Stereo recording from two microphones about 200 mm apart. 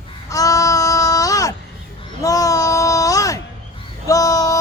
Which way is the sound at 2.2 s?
15° left (ahead or behind).